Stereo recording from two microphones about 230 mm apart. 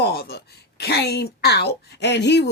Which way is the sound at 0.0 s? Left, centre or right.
Left.